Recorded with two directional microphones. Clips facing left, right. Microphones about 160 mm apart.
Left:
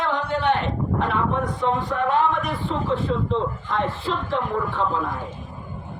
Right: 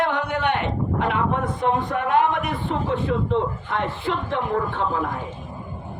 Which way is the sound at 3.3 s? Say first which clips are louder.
Right 1 dB; 65° right (ahead or behind).